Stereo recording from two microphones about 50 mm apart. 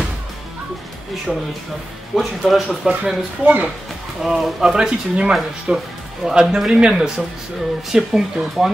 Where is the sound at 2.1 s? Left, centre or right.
Centre.